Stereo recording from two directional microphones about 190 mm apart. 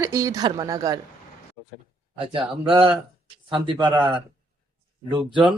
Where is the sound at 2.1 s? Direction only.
25° right (ahead or behind).